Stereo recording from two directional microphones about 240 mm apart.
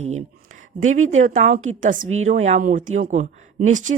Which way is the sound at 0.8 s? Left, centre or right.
Right.